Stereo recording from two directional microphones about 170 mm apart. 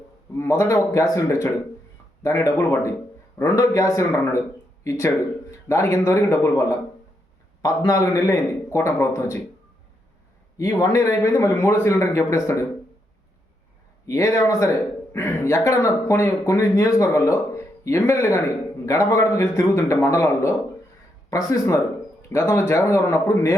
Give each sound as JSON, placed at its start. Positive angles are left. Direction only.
{"t": 0.3, "sound": "a man's voice", "side_deg": 15}
{"t": 10.6, "sound": "a man's voice", "side_deg": 20}
{"t": 14.1, "sound": "a man's voice", "side_deg": 20}